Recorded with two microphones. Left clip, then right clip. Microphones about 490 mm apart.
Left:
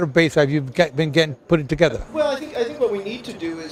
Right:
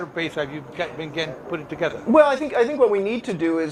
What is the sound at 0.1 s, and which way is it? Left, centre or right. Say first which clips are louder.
A man's voice: left 12 dB; left.